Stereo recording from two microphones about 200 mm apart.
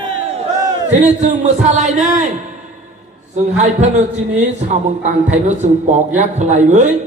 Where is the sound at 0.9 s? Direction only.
35° right (ahead or behind).